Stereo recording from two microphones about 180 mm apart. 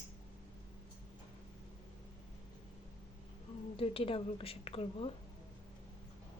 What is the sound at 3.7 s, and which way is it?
A woman's voice, 30° left (ahead or behind).